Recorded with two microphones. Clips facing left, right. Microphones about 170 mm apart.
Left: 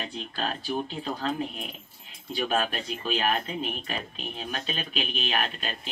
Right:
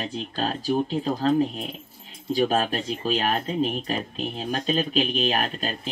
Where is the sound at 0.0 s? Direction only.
35° right (ahead or behind).